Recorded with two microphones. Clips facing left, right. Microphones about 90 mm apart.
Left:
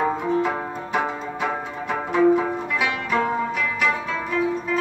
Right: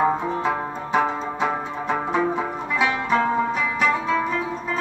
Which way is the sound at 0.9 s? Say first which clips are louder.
Right 4 dB; 25° right (ahead or behind).